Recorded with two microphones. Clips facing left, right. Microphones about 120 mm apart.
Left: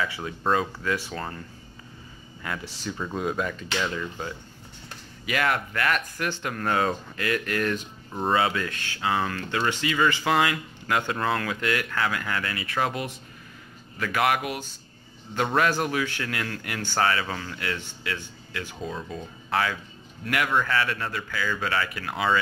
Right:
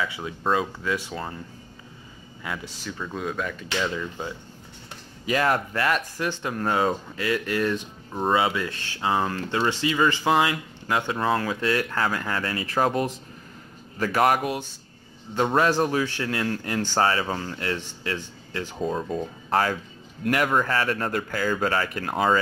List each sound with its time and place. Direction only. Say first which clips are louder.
0.4 s speech: even; 5° right (ahead or behind)
0.9 s speech: right 1 dB; 20° right (ahead or behind)
2.4 s speech: even; 10° right (ahead or behind)
2.9 s speech: left 2 dB; 5° left (ahead or behind)
3.5 s speech: right 1 dB; 5° right (ahead or behind)
5.2 s speech: right 3 dB; 30° right (ahead or behind)
8.1 s speech: right 2 dB; 5° right (ahead or behind)
8.4 s speech: right 1 dB; 15° right (ahead or behind)
8.7 s speech: right 2 dB; 25° right (ahead or behind)
15.3 s speech: right 3 dB; 25° right (ahead or behind); by 22.4 s 40° right (ahead or behind)